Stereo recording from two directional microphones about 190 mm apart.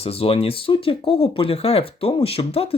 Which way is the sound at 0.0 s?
30° left (ahead or behind).